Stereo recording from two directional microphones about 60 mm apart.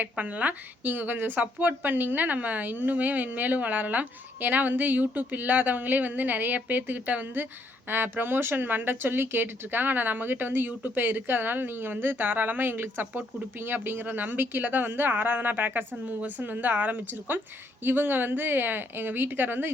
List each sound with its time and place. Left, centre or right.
0.0 s speech: right